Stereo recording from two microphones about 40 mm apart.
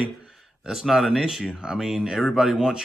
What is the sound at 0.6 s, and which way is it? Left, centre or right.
Speech, centre.